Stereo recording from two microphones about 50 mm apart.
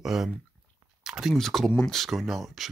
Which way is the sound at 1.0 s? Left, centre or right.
Centre.